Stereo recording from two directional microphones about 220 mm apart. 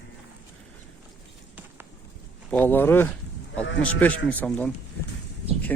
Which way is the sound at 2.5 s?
10° left (ahead or behind).